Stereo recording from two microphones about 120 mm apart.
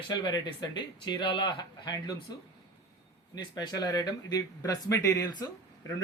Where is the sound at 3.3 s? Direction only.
35° left (ahead or behind).